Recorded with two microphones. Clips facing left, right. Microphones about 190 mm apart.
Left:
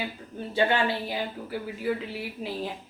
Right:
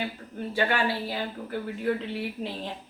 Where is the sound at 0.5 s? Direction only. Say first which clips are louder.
Left 2 dB; 20° left (ahead or behind).